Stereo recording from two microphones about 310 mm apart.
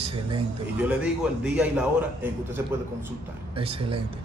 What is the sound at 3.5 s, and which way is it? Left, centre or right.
Speech, centre.